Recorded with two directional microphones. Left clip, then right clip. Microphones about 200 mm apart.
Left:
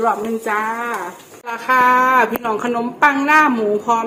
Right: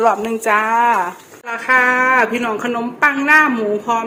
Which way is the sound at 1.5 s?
5° right (ahead or behind).